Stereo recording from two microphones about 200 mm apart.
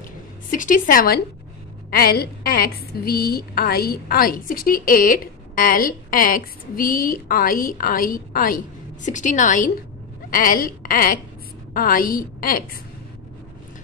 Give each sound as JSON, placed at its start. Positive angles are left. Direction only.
{"t": 0.5, "sound": "a woman's voice", "side_deg": 40}